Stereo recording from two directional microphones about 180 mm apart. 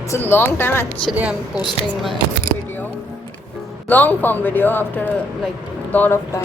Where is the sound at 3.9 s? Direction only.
10° left (ahead or behind).